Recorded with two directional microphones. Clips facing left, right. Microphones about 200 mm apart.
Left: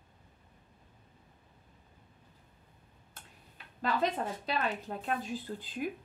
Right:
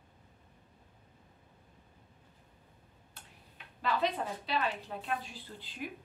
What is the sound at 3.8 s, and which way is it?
Speech, 45° left (ahead or behind).